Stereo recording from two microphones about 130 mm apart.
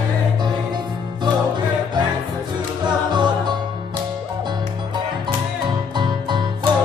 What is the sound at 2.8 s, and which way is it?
Music, 35° right (ahead or behind).